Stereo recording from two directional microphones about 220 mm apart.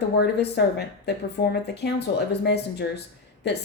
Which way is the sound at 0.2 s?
50° left (ahead or behind).